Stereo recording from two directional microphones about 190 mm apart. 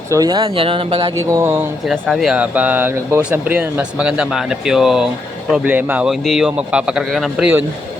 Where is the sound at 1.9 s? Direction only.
Centre (ahead or behind).